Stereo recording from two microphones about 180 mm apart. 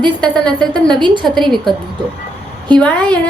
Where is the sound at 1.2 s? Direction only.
Centre (ahead or behind).